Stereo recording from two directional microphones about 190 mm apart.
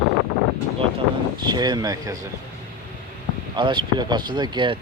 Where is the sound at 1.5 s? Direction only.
20° right (ahead or behind).